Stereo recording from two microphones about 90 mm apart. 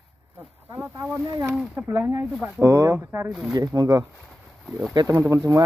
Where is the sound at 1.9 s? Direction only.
30° right (ahead or behind).